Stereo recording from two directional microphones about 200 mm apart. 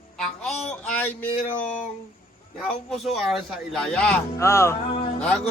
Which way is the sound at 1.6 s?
5° left (ahead or behind).